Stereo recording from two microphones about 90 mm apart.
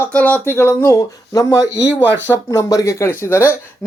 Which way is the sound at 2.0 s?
20° right (ahead or behind).